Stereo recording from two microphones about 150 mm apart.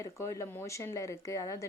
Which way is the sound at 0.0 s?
20° left (ahead or behind).